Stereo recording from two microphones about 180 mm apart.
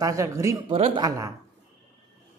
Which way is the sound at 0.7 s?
30° right (ahead or behind).